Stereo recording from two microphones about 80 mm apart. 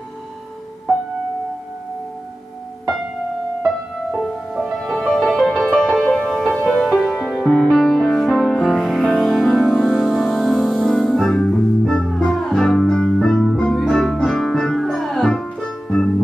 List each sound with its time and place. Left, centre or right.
3.6 s music: centre